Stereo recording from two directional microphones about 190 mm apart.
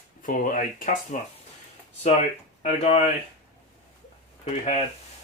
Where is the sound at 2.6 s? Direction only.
35° left (ahead or behind).